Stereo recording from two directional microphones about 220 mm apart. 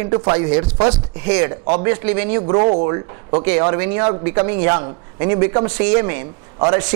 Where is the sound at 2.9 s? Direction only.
15° right (ahead or behind).